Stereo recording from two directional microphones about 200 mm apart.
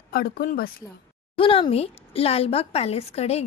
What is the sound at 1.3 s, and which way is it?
A woman's voice, 25° left (ahead or behind).